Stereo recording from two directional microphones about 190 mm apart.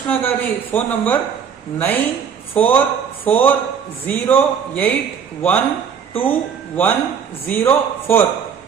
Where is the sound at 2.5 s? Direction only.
10° left (ahead or behind).